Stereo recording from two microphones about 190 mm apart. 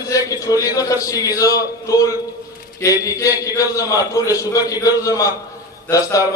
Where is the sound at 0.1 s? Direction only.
15° left (ahead or behind).